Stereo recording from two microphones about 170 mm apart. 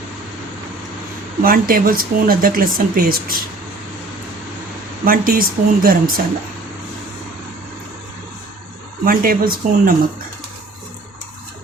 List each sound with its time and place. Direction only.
1.4 s speech: 55° right (ahead or behind)
5.0 s speech: 55° right (ahead or behind)
9.0 s speech: 60° right (ahead or behind)